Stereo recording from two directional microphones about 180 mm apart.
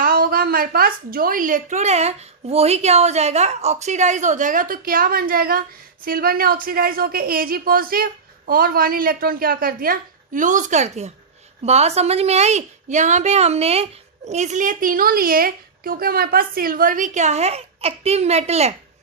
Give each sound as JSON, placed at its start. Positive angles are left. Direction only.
{"t": 0.0, "sound": "a woman's voice", "side_deg": -55}